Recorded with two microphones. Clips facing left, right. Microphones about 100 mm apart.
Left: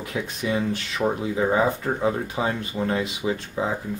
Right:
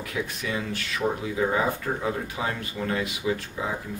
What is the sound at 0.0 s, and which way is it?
Speech, 25° left (ahead or behind).